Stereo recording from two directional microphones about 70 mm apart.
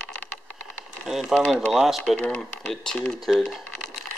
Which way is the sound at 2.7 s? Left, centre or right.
Centre.